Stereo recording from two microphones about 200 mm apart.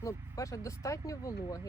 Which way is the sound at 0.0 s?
15° left (ahead or behind).